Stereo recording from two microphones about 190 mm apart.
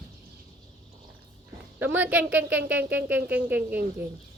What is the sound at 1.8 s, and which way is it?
Speech, 10° right (ahead or behind).